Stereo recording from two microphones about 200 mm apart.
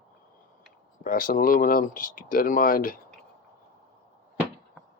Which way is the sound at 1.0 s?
45° left (ahead or behind).